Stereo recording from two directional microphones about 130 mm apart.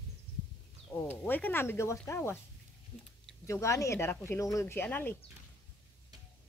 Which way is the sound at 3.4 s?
20° left (ahead or behind).